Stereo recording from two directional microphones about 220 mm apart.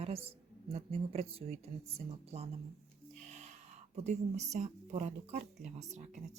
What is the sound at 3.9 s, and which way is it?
Speech, 30° right (ahead or behind).